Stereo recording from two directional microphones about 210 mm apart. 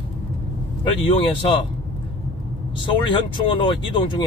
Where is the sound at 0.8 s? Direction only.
25° left (ahead or behind).